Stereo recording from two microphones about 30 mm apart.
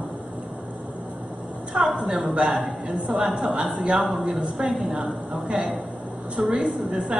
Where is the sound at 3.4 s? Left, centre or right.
Right.